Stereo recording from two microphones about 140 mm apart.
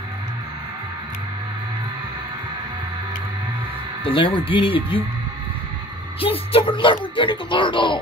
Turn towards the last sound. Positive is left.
turn(degrees=35)  # may be behind; listen again after turning